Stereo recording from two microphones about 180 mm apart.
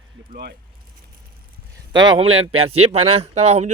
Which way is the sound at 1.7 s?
25° right (ahead or behind).